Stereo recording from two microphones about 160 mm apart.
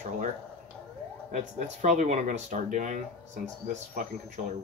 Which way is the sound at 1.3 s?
50° right (ahead or behind).